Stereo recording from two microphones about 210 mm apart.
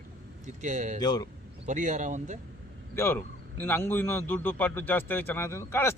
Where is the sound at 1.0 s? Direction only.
20° left (ahead or behind).